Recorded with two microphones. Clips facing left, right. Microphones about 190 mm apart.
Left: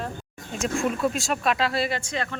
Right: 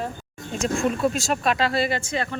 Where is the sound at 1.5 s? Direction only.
Centre (ahead or behind).